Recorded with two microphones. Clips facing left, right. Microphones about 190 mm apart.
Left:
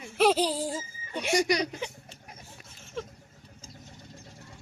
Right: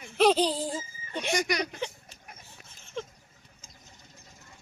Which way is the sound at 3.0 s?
5° left (ahead or behind).